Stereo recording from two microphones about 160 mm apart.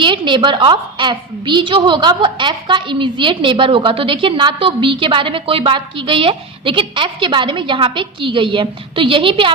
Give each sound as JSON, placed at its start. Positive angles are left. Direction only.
{"t": 0.0, "sound": "a woman's voice", "side_deg": -30}